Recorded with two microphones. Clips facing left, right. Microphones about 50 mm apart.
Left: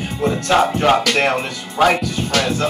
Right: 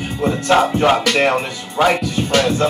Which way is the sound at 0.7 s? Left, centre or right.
Centre.